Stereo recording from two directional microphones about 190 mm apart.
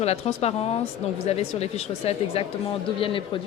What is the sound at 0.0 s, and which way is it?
Speech, 35° left (ahead or behind).